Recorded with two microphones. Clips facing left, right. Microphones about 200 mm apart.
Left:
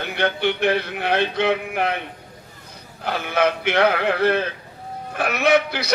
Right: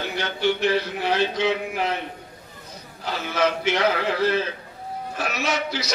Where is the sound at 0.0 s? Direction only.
60° left (ahead or behind).